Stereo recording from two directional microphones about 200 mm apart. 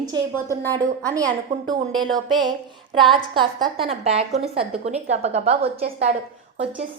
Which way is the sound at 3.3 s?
25° right (ahead or behind).